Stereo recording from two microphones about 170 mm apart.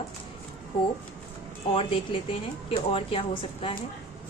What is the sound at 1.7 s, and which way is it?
A woman's voice, 30° left (ahead or behind).